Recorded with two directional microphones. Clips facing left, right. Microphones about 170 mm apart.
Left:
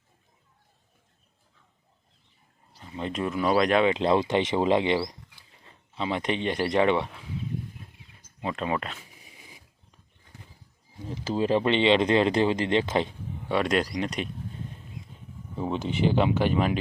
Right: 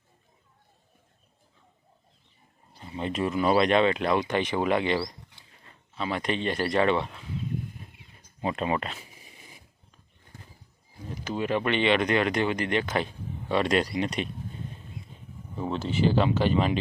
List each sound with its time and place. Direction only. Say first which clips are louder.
2.9 s speech: right 1 dB; 5° right (ahead or behind)
3.8 s speech: left 2 dB; 25° left (ahead or behind)
8.4 s speech: right 1 dB; 5° right (ahead or behind)
11.1 s speech: left 4 dB; 30° left (ahead or behind)
13.5 s speech: even; 5° left (ahead or behind)
15.5 s speech: even; 15° left (ahead or behind)